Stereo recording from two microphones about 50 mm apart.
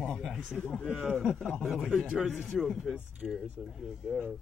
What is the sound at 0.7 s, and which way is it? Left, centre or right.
Speech, centre.